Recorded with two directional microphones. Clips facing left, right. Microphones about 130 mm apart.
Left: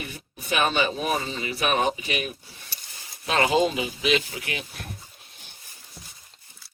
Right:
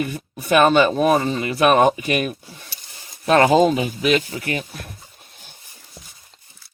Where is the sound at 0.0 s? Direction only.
55° right (ahead or behind).